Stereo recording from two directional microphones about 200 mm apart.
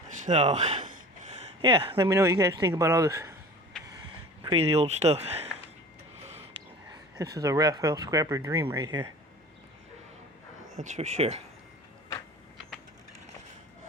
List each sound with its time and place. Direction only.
0.2 s gasp: 35° right (ahead or behind)
1.6 s speech: 25° right (ahead or behind)
2.1 s speech: 15° right (ahead or behind)
4.4 s speech: 30° right (ahead or behind)
7.3 s speech: 15° right (ahead or behind)
10.8 s speech: 35° right (ahead or behind)